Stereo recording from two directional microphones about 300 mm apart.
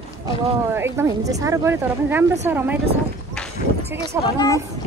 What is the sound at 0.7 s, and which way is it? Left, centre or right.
A woman's voice, centre.